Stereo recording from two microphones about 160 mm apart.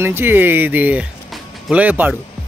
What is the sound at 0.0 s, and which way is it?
Speech, 15° right (ahead or behind).